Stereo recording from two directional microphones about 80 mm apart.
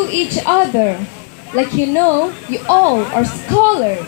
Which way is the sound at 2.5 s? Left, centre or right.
Right.